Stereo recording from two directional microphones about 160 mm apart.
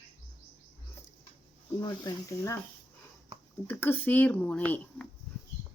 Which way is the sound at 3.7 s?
15° left (ahead or behind).